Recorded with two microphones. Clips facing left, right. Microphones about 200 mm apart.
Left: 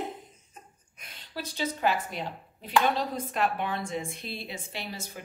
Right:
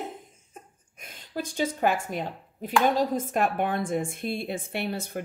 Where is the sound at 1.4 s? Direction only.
50° right (ahead or behind).